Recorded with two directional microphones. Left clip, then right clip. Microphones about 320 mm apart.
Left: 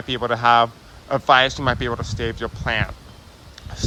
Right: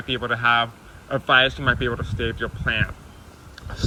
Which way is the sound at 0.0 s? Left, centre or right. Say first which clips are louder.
Left 2 dB; left.